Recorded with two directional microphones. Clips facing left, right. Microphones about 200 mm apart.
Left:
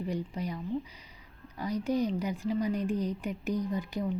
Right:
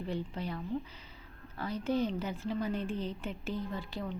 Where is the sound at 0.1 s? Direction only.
10° left (ahead or behind).